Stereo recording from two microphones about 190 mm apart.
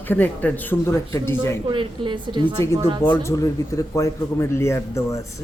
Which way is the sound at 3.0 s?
10° left (ahead or behind).